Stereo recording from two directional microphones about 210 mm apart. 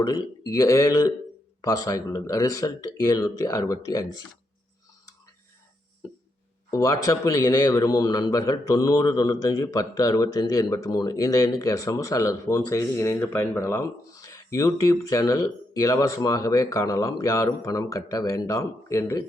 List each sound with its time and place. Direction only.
0.0 s a man's voice: 15° left (ahead or behind)
6.7 s a man's voice: 15° left (ahead or behind)